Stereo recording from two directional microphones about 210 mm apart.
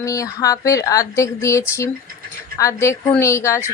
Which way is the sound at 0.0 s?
15° left (ahead or behind).